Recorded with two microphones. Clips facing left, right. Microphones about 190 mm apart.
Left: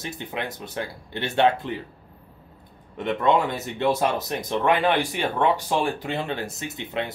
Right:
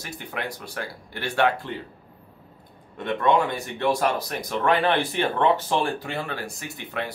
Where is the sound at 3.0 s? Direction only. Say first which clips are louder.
Even; 20° left (ahead or behind).